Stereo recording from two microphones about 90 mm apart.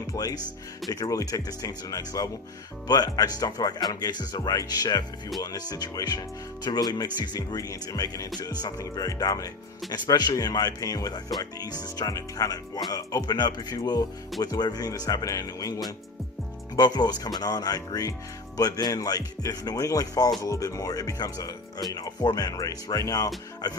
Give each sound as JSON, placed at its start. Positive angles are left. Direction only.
{"t": 0.1, "sound": "speech", "side_deg": 40}
{"t": 16.7, "sound": "speech", "side_deg": 50}